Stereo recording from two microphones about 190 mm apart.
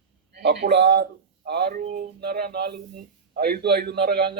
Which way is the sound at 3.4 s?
55° right (ahead or behind).